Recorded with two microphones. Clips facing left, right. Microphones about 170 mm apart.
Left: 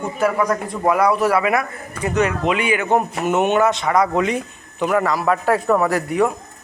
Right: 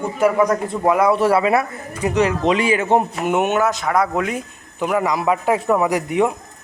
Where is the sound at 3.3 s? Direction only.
10° right (ahead or behind).